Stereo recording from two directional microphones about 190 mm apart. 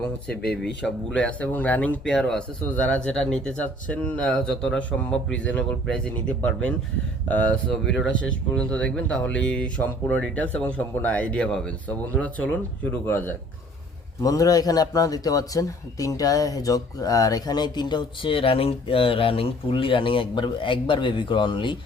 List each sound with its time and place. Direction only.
0.4 s a man's voice: 5° left (ahead or behind); by 21.8 s 25° left (ahead or behind)